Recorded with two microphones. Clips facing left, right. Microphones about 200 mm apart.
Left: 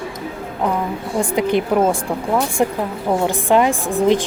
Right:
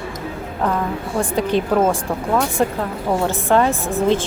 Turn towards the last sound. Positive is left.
turn(degrees=15)  # may be behind; listen again after turning